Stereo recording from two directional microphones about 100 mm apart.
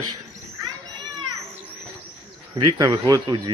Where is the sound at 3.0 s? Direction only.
45° right (ahead or behind).